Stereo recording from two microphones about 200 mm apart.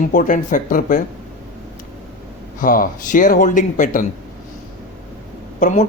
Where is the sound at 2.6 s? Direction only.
40° left (ahead or behind).